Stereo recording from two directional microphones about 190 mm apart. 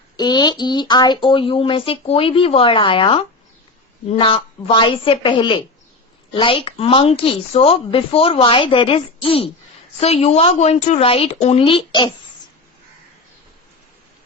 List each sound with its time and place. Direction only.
0.2 s a woman's voice: 20° left (ahead or behind)